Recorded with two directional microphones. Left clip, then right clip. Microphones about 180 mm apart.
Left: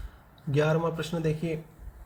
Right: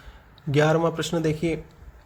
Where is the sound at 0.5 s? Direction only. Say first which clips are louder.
Right 6 dB; 45° right (ahead or behind).